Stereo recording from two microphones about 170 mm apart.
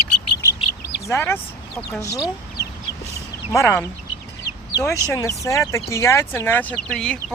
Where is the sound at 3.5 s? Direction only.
15° left (ahead or behind).